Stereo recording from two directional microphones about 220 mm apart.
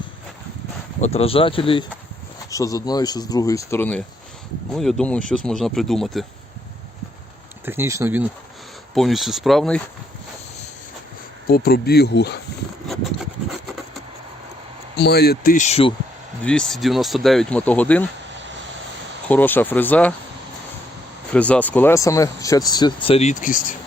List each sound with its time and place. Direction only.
1.0 s speech: 25° left (ahead or behind); by 6.2 s centre (ahead or behind)
7.6 s speech: 10° right (ahead or behind)
11.4 s speech: 45° left (ahead or behind)
14.9 s speech: 50° left (ahead or behind); by 15.9 s 30° left (ahead or behind)
16.4 s speech: 5° left (ahead or behind)
19.3 s speech: 10° left (ahead or behind)
21.3 s speech: 5° left (ahead or behind); by 23.7 s 35° left (ahead or behind)